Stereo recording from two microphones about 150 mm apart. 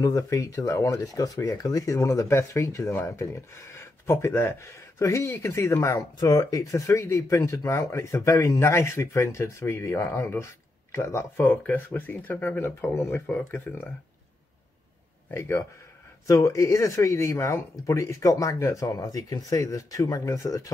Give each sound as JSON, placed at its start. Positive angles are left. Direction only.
{"t": 0.0, "sound": "speech", "side_deg": 25}
{"t": 15.3, "sound": "speech", "side_deg": 20}